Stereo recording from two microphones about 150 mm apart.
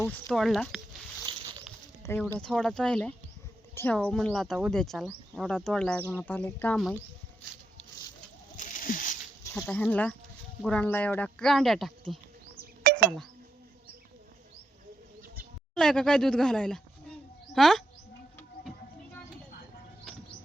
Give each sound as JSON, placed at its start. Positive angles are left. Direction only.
{"t": 0.3, "sound": "speech", "side_deg": 0}
{"t": 1.3, "sound": "a sound", "side_deg": -35}
{"t": 2.1, "sound": "speech", "side_deg": 15}
{"t": 2.4, "sound": "speech", "side_deg": 5}
{"t": 8.5, "sound": "a sound", "side_deg": 60}
{"t": 9.6, "sound": "speech", "side_deg": 10}
{"t": 12.5, "sound": "chink", "side_deg": -90}
{"t": 15.7, "sound": "speech", "side_deg": 5}